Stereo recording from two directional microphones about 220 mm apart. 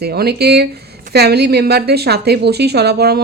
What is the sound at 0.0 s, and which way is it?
A woman's voice, 45° right (ahead or behind).